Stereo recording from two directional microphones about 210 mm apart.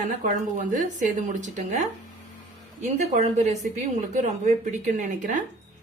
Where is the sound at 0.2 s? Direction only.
35° right (ahead or behind).